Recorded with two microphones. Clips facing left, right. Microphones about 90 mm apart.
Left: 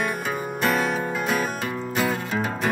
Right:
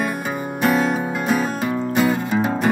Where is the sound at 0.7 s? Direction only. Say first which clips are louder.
Right 4 dB; 20° right (ahead or behind).